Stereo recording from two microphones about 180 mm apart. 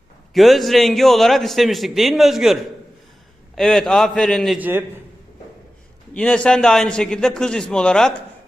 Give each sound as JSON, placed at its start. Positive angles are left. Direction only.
{"t": 0.3, "sound": "a man's voice", "side_deg": 0}
{"t": 6.1, "sound": "a man's voice", "side_deg": 5}